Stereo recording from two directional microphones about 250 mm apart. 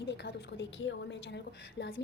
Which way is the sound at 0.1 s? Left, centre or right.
Left.